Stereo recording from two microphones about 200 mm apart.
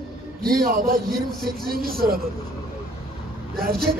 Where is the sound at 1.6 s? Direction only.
45° right (ahead or behind).